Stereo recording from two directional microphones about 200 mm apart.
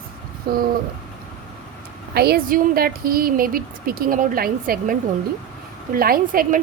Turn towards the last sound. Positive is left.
turn(degrees=-45)  # may be behind; listen again after turning